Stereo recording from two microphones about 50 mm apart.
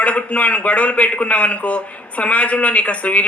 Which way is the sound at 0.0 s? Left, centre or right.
Left.